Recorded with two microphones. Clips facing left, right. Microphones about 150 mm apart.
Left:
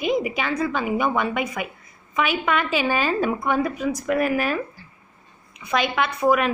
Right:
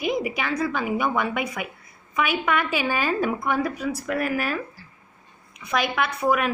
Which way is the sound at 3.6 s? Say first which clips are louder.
Left 2 dB; 20° left (ahead or behind).